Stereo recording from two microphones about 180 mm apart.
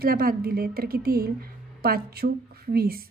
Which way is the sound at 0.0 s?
55° right (ahead or behind).